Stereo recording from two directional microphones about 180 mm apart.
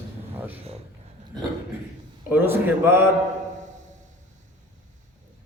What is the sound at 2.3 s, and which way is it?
Speech, 10° right (ahead or behind).